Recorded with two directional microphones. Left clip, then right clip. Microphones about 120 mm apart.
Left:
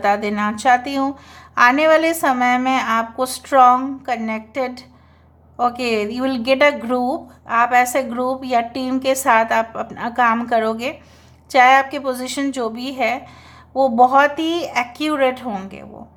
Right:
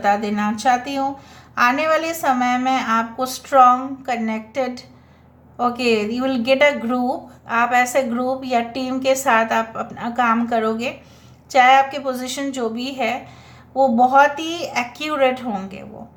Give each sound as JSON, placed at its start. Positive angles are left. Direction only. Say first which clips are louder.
{"t": 0.0, "sound": "a woman's voice", "louder": "left 1 dB", "side_deg": 50}